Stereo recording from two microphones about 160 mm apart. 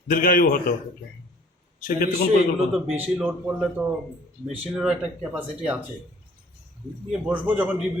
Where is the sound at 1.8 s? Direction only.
65° left (ahead or behind).